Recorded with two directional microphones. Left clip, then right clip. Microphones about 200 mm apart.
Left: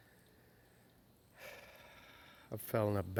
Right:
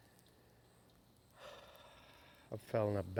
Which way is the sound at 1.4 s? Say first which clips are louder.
Left 2 dB; 25° left (ahead or behind).